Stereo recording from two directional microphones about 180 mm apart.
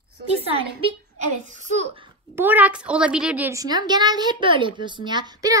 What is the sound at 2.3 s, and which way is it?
A woman's voice, 10° right (ahead or behind).